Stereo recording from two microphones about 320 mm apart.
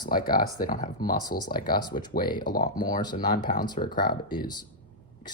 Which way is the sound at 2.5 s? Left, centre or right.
Left.